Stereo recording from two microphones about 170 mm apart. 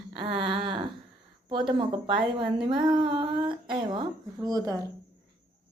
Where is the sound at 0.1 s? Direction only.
30° right (ahead or behind).